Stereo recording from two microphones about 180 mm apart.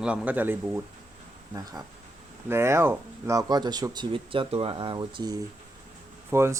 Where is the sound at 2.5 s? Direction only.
15° right (ahead or behind).